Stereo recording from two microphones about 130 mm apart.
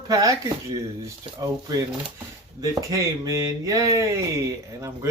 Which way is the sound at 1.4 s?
30° right (ahead or behind).